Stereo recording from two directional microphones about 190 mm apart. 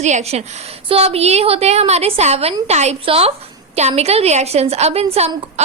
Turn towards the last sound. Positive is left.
turn(degrees=-30)  # may be behind; listen again after turning